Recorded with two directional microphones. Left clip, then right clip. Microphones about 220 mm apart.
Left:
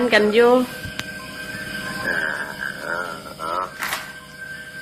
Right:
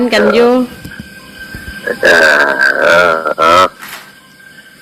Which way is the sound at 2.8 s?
50° right (ahead or behind).